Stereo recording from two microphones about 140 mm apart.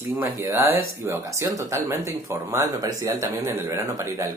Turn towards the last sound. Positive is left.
turn(degrees=-20)  # may be behind; listen again after turning